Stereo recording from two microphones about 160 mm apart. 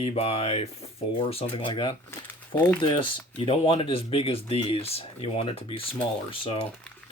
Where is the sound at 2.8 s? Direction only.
30° left (ahead or behind).